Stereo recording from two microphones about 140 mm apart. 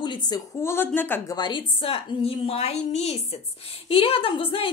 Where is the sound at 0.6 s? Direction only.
15° left (ahead or behind).